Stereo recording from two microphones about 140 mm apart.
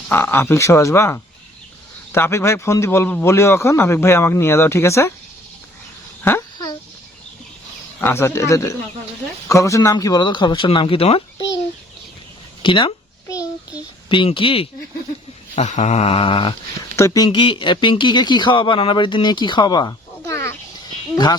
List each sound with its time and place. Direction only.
0.1 s a man's voice: 15° left (ahead or behind)
8.0 s a man's voice: 15° left (ahead or behind); by 11.2 s 45° left (ahead or behind)
12.6 s speech: 40° left (ahead or behind)
14.1 s speech: 35° left (ahead or behind)
15.5 s a sound: 60° left (ahead or behind); by 16.6 s 40° left (ahead or behind)
16.9 s speech: 25° left (ahead or behind)
20.8 s a sound: 30° left (ahead or behind)